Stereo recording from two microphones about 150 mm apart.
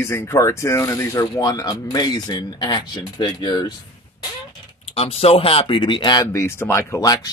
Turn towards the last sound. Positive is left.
turn(degrees=20)  # may be behind; listen again after turning